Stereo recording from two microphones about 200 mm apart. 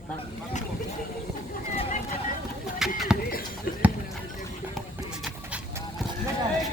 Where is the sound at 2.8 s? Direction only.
Centre (ahead or behind).